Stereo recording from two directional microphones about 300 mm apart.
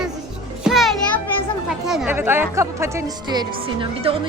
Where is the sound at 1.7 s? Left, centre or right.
Centre.